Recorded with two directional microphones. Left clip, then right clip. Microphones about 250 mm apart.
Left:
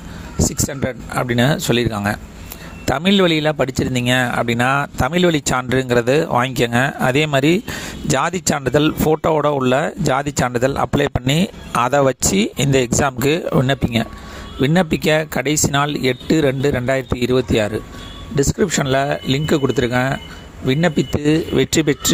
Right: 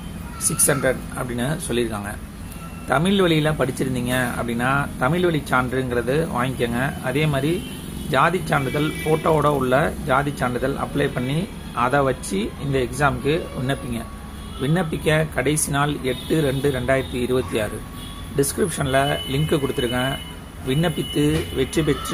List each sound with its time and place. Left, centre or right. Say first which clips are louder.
0.7 s speech: right 3 dB; left